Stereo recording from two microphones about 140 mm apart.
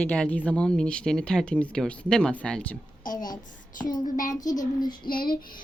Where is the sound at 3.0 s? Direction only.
80° left.